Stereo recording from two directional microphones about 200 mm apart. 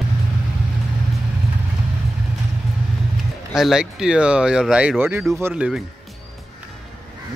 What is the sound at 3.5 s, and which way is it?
Speech, centre (ahead or behind).